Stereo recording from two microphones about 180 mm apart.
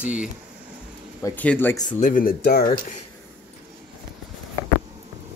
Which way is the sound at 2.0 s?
50° left (ahead or behind).